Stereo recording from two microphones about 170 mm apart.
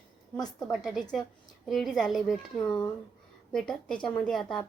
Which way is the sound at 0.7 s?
Centre (ahead or behind).